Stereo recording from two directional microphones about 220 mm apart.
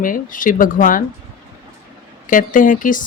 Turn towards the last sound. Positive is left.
turn(degrees=35)  # may be behind; listen again after turning